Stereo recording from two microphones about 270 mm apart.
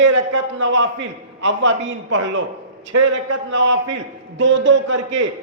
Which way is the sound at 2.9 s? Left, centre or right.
Right.